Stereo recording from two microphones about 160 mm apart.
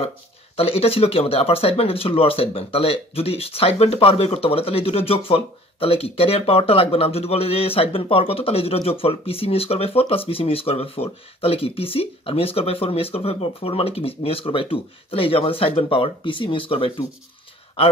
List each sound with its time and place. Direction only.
0.6 s speech: 35° left (ahead or behind)